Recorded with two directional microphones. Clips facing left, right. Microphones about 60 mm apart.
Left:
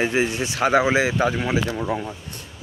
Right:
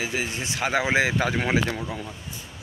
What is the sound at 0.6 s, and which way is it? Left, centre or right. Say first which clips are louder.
Speech: left 4 dB; centre.